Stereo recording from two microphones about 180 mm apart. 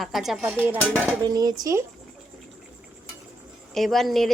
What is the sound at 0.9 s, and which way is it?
Dishes, 10° left (ahead or behind).